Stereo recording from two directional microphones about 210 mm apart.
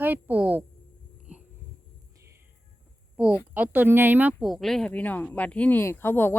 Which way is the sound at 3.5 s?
10° right (ahead or behind).